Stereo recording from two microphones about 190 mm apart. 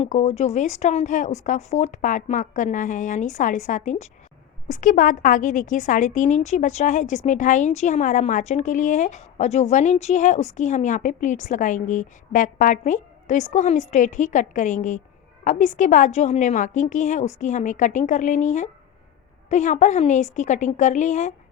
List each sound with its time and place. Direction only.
0.0 s a woman's voice: 35° left (ahead or behind)